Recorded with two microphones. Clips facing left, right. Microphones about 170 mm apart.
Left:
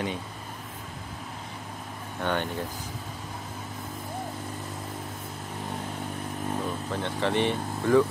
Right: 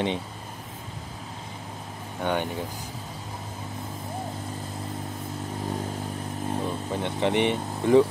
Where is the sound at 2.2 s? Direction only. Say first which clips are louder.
Right 2 dB; 10° right (ahead or behind).